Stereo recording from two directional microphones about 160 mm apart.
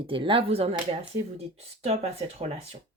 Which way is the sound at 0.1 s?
30° right (ahead or behind).